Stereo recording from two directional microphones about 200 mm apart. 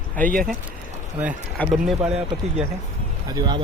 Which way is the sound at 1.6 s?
Centre (ahead or behind).